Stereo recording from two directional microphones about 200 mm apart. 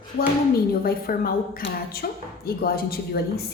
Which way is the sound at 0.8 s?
50° left (ahead or behind).